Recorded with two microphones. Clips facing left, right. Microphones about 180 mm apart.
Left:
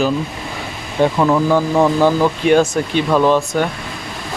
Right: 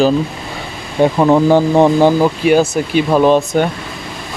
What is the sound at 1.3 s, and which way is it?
Speech, 30° right (ahead or behind).